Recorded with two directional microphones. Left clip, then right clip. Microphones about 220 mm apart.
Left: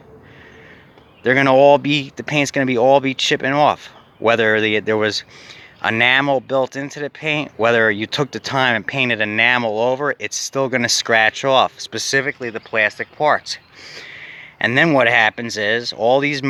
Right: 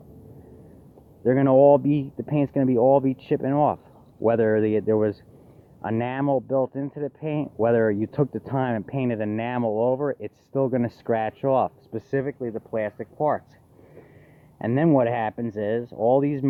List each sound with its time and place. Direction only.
1.2 s speech: 5° left (ahead or behind)
15.8 s speech: 25° left (ahead or behind)
16.1 s speech: centre (ahead or behind)